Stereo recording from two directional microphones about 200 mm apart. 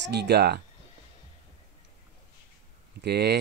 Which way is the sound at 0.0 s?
55° right (ahead or behind).